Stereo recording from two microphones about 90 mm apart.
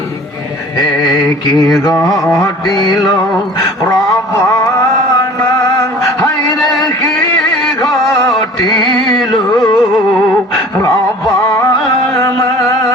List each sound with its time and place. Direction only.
1.8 s mantra: 45° left (ahead or behind)
4.4 s music: 40° left (ahead or behind)
8.0 s music: centre (ahead or behind)
8.8 s music: 55° left (ahead or behind)
10.8 s music: 40° left (ahead or behind)